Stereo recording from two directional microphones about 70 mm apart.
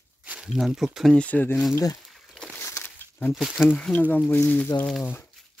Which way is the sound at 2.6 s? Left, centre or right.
Left.